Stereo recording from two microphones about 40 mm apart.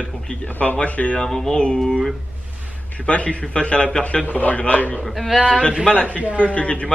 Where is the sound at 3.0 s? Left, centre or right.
Left.